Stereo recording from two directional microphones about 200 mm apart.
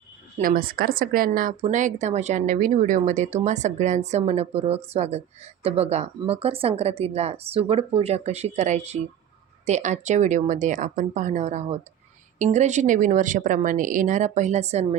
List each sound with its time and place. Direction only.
0.3 s speech: 45° right (ahead or behind)